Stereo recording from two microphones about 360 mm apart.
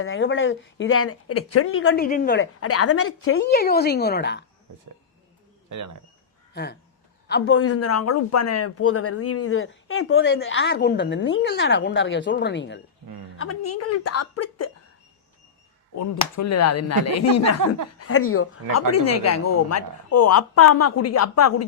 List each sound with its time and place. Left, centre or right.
0.0 s a man's voice: left
5.6 s speech: right
6.5 s a man's voice: left
13.4 s speech: left
16.0 s speech: left